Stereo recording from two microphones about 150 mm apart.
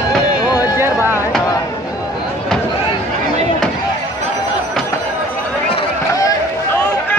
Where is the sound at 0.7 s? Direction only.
15° right (ahead or behind).